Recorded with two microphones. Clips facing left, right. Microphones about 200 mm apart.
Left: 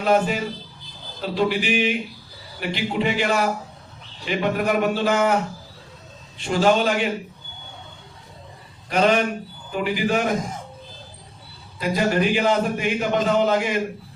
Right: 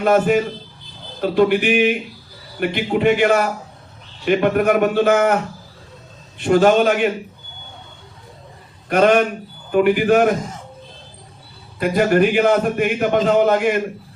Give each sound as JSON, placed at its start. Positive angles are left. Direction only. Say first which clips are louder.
{"t": 0.0, "sound": "a man's voice", "louder": "right 5 dB", "side_deg": -55}
{"t": 6.4, "sound": "a man's voice", "louder": "right 6 dB", "side_deg": -55}
{"t": 8.9, "sound": "a man's voice", "louder": "right 5 dB", "side_deg": -55}
{"t": 11.8, "sound": "a man's voice", "louder": "right 6 dB", "side_deg": -55}